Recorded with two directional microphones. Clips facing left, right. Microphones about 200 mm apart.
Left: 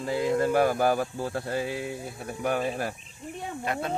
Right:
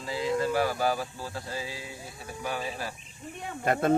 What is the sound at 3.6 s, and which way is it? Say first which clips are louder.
Speech: right 7 dB; 50° right (ahead or behind).